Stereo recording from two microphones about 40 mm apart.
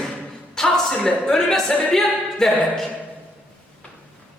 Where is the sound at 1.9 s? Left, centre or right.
Centre.